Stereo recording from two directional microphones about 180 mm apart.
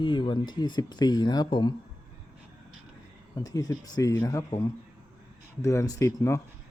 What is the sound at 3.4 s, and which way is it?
Speech, 20° left (ahead or behind).